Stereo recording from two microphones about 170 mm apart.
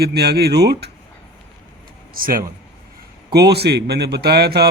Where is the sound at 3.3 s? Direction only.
75° right (ahead or behind).